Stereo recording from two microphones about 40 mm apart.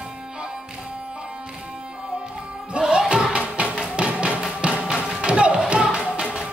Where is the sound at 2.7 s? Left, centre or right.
Right.